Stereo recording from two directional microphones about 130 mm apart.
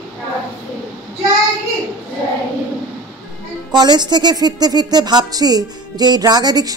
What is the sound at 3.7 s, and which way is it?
Speech, 35° right (ahead or behind).